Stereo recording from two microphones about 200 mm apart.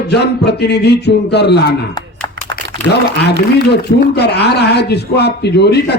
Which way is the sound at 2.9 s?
55° left (ahead or behind).